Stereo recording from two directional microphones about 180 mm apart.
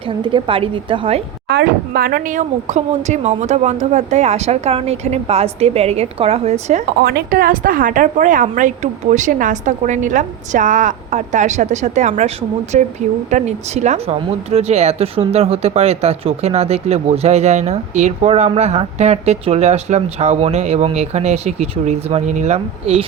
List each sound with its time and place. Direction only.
0.2 s a woman's voice: 30° right (ahead or behind)
1.5 s speech: 65° right (ahead or behind); by 6.8 s 35° right (ahead or behind)
7.0 s a woman's voice: 55° right (ahead or behind); by 23.0 s 35° right (ahead or behind)